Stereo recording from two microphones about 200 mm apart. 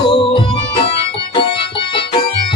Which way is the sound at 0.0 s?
25° left (ahead or behind).